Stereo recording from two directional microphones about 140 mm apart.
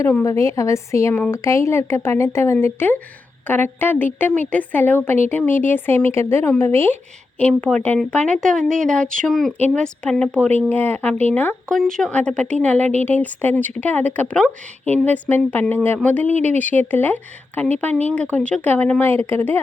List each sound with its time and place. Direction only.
0.0 s speech: 20° left (ahead or behind)
16.3 s speech: 55° right (ahead or behind)
16.6 s speech: 10° left (ahead or behind)